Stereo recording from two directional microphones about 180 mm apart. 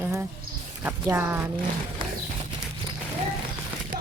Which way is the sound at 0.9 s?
10° right (ahead or behind).